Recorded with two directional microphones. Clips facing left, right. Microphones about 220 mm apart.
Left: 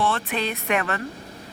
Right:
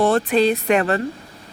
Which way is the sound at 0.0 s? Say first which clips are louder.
Right 9 dB; 40° right (ahead or behind).